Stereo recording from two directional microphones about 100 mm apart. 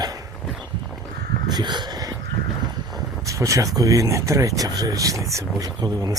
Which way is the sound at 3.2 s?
30° right (ahead or behind).